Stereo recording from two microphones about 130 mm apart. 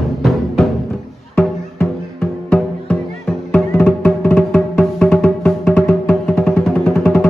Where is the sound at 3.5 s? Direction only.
15° left (ahead or behind).